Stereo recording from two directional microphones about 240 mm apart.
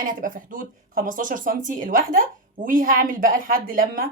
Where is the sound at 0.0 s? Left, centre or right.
Right.